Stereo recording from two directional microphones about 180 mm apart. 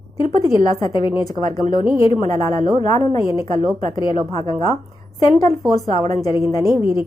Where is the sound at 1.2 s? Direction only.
20° left (ahead or behind).